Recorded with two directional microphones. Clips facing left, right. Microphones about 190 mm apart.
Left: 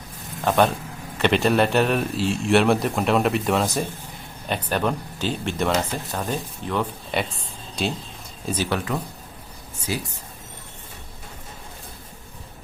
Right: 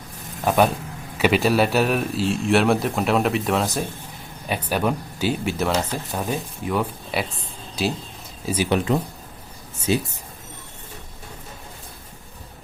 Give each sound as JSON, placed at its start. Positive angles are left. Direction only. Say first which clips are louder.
{"t": 0.4, "sound": "a man's voice", "louder": "right 1 dB", "side_deg": -5}
{"t": 8.7, "sound": "speech", "louder": "right 5 dB", "side_deg": -25}